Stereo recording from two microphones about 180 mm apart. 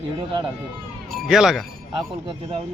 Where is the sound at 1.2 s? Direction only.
Centre (ahead or behind).